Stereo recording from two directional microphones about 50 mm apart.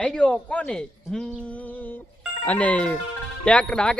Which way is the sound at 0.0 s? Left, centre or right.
Centre.